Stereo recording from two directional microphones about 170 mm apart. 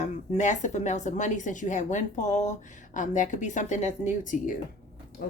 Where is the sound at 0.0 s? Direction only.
45° left (ahead or behind).